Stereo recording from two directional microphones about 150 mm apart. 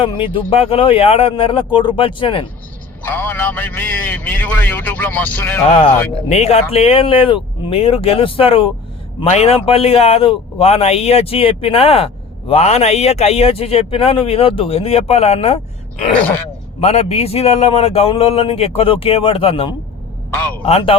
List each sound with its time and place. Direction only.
0.0 s speech: 35° left (ahead or behind)
3.0 s a man's voice: 10° left (ahead or behind)
5.6 s speech: 45° left (ahead or behind)
16.8 s speech: 45° left (ahead or behind)